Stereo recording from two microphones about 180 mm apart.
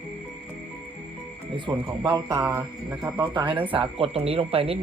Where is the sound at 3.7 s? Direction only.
30° right (ahead or behind).